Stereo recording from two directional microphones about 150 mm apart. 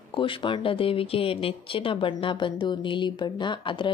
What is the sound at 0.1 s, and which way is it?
A woman's voice, 35° left (ahead or behind).